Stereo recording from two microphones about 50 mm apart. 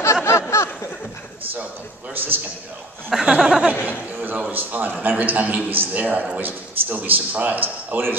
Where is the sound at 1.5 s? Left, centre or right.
Right.